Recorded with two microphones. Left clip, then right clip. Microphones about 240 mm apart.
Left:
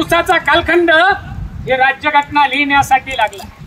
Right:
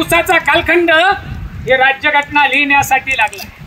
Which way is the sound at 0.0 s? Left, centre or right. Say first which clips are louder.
Right 1 dB; centre.